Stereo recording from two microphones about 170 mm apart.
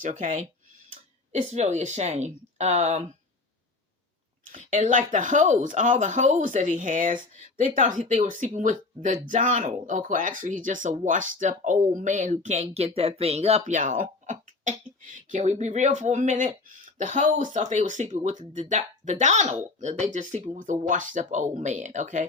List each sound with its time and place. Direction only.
0.0 s speech: 45° right (ahead or behind)
4.5 s speech: 50° right (ahead or behind)